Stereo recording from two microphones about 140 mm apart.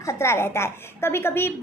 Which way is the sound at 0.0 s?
20° left (ahead or behind).